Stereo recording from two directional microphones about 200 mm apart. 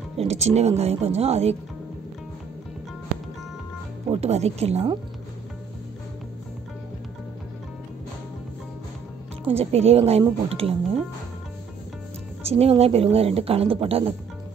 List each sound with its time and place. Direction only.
0.2 s speech: 35° right (ahead or behind)
4.1 s speech: 30° right (ahead or behind)
9.4 s speech: 30° right (ahead or behind)
12.4 s a woman's voice: 30° right (ahead or behind)